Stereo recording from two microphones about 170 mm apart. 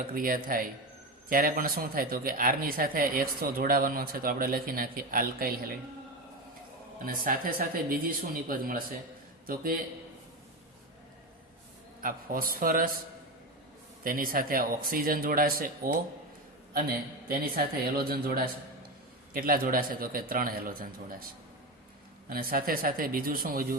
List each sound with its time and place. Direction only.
0.1 s speech: 55° right (ahead or behind)
7.0 s speech: 55° right (ahead or behind)
12.0 s speech: 55° right (ahead or behind)
14.0 s speech: 55° right (ahead or behind)
22.3 s speech: 60° right (ahead or behind)